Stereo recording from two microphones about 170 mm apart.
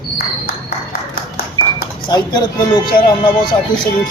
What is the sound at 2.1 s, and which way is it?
Speech, 25° left (ahead or behind).